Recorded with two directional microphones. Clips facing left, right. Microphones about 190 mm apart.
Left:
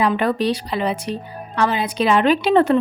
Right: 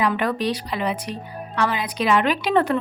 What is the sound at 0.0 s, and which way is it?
A woman's voice, 30° left (ahead or behind).